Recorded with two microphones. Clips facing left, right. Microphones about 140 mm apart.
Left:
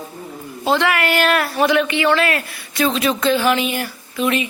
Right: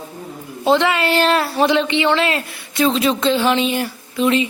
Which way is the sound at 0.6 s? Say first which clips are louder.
Right 2 dB; 20° right (ahead or behind).